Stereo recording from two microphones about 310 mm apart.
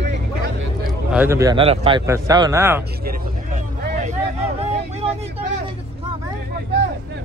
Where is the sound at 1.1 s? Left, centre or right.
Centre.